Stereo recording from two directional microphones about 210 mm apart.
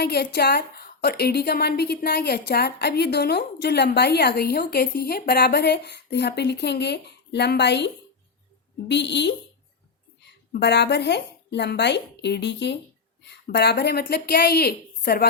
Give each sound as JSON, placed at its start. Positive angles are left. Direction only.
{"t": 0.0, "sound": "a woman's voice", "side_deg": 50}
{"t": 8.9, "sound": "a woman's voice", "side_deg": 55}
{"t": 10.6, "sound": "a woman's voice", "side_deg": 55}